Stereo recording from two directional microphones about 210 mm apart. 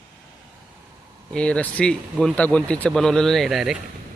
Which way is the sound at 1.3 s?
5° left (ahead or behind).